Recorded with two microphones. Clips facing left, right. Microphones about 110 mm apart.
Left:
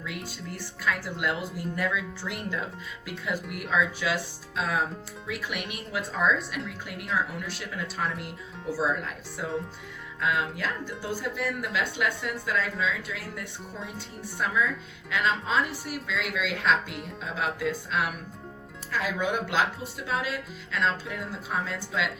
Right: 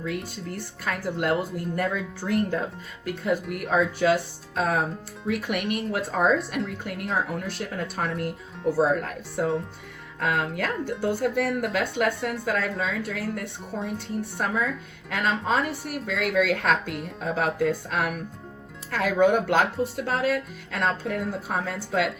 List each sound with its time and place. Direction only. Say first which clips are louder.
0.5 s speech: left 1 dB; 50° right (ahead or behind)
3.4 s speech: right 5 dB; centre (ahead or behind)
3.7 s speech: right 6 dB; 50° right (ahead or behind)
8.1 s speech: right 7 dB; centre (ahead or behind)
8.7 s speech: right 5 dB; 55° right (ahead or behind)